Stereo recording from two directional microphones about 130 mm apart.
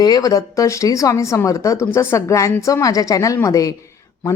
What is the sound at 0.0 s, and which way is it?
A woman's voice, 30° left (ahead or behind).